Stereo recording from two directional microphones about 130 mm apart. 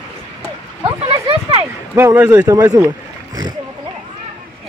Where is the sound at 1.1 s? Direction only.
50° right (ahead or behind).